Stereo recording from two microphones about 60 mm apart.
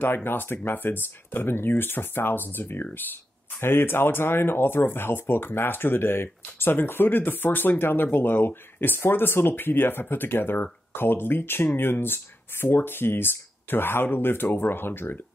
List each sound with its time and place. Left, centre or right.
0.0 s speech: left